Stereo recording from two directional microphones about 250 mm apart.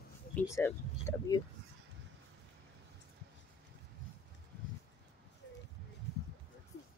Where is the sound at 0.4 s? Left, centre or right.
Centre.